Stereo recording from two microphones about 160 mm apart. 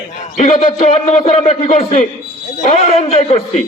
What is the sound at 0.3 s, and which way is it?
A man's voice, 35° left (ahead or behind).